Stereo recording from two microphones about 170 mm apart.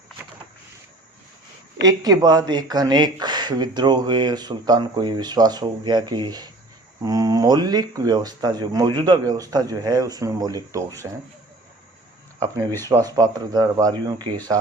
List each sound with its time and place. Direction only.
1.8 s speech: 20° right (ahead or behind)
12.9 s speech: 20° right (ahead or behind)